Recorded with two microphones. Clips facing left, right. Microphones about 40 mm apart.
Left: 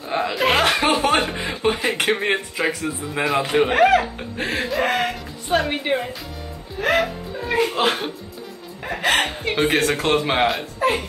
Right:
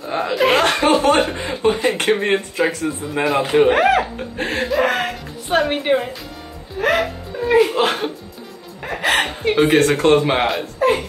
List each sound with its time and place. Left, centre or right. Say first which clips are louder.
0.0 s chuckle: right 3 dB; centre
1.7 s a sound: right 4 dB; centre
2.0 s a man's voice: right 3 dB; centre